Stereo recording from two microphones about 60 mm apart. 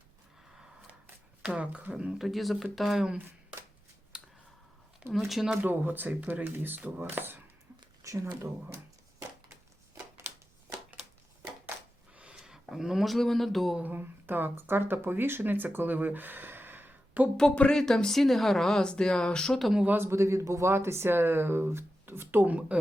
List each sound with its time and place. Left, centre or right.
1.4 s speech: centre
2.2 s speech: centre
4.1 s a sound: centre
5.1 s speech: centre
5.6 s speech: right
8.0 s speech: right
10.3 s shuffling cards: right
12.1 s a sound: centre
12.4 s speech: centre
13.8 s speech: right
17.5 s speech: centre
17.7 s speech: centre
20.0 s speech: right